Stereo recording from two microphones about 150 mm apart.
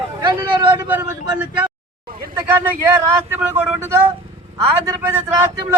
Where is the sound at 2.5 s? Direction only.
15° right (ahead or behind).